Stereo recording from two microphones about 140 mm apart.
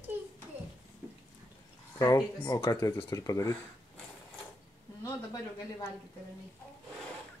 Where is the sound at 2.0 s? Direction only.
25° left (ahead or behind).